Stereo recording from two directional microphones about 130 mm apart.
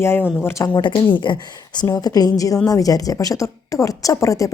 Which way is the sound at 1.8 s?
30° left (ahead or behind).